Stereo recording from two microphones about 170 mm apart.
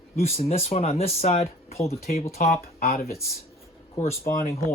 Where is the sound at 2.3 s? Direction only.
55° left (ahead or behind).